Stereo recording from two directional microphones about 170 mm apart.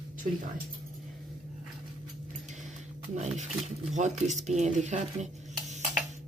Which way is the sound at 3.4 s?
45° right (ahead or behind).